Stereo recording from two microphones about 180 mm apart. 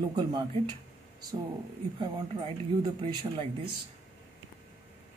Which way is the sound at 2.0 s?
25° right (ahead or behind).